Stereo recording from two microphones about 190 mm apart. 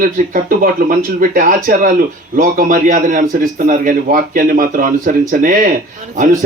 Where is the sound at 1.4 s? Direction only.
45° right (ahead or behind).